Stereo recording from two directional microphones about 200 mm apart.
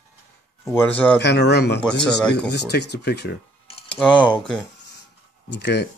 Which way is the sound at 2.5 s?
55° left (ahead or behind).